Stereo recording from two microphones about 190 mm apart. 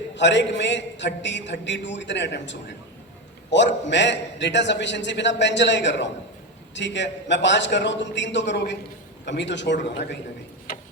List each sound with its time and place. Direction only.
0.2 s a man's voice: 70° left (ahead or behind)